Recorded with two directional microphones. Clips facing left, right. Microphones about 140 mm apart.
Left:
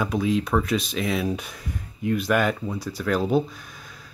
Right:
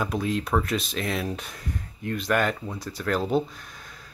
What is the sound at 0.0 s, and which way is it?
Speech, centre (ahead or behind).